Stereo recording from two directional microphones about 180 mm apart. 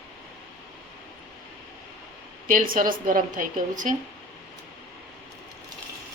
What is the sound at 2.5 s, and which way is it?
A woman's voice, 50° right (ahead or behind).